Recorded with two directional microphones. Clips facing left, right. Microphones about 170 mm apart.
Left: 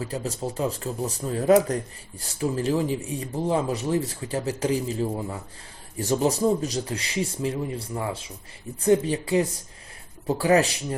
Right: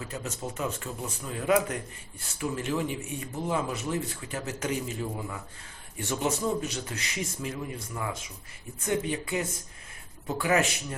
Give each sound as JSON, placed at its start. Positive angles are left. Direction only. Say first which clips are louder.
{"t": 0.0, "sound": "speech", "louder": "left 6 dB", "side_deg": 35}